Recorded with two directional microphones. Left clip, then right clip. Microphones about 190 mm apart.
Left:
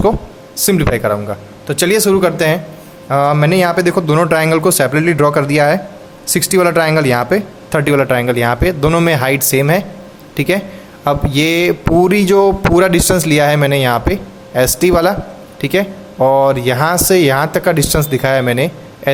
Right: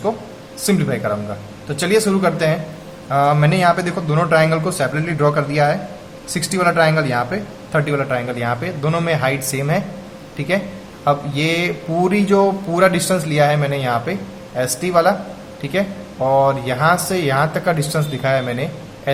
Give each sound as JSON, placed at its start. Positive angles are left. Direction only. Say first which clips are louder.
{"t": 0.5, "sound": "a man's voice", "louder": "left 6 dB", "side_deg": 55}